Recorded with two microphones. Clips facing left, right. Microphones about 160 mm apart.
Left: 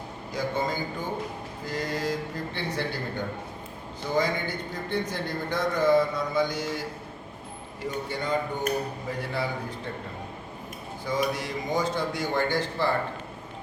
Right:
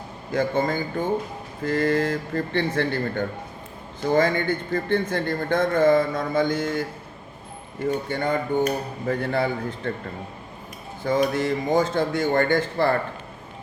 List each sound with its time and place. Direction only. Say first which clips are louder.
0.3 s a man's voice: right 6 dB; 55° right (ahead or behind)
8.1 s speech: right 3 dB; 55° right (ahead or behind)
11.0 s a man's voice: right 7 dB; 55° right (ahead or behind)